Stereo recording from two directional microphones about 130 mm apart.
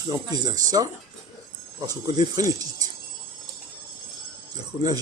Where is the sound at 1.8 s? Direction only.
30° right (ahead or behind).